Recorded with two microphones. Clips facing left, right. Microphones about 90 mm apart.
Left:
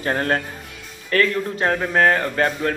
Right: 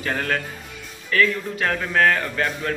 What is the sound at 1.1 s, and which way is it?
Speech, 50° left (ahead or behind).